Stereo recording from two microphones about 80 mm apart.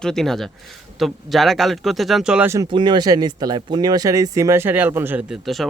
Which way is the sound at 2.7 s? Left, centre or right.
Right.